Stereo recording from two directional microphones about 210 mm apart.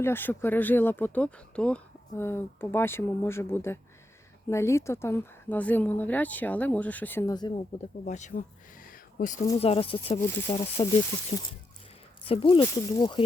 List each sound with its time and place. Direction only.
0.0 s speech: 10° left (ahead or behind)
8.0 s speech: 35° left (ahead or behind)
9.6 s speech: 25° left (ahead or behind)
10.2 s speech: 10° left (ahead or behind)
10.5 s speech: 25° left (ahead or behind)
12.2 s speech: 25° left (ahead or behind)